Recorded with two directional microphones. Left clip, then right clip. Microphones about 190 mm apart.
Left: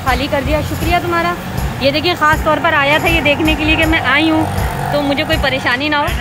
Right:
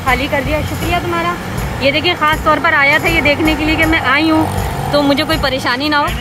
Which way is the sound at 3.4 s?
5° right (ahead or behind).